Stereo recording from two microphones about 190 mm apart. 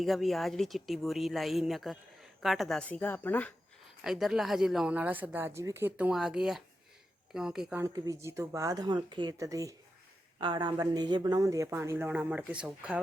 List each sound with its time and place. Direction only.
0.0 s speech: centre (ahead or behind)
4.0 s speech: centre (ahead or behind)